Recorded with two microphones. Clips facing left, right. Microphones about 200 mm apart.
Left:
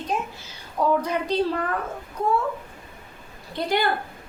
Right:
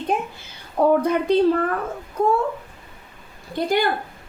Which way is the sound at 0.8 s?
55° right (ahead or behind).